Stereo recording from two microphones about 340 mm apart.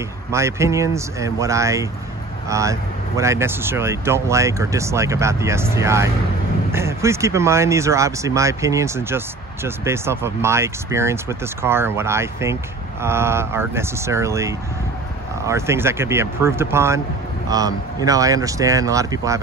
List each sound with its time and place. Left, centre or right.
0.3 s speech: centre